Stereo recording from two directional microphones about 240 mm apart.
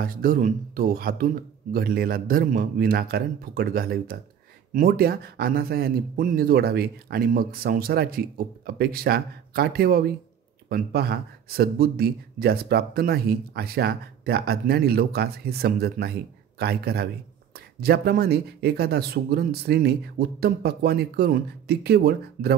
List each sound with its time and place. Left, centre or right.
0.0 s speech: right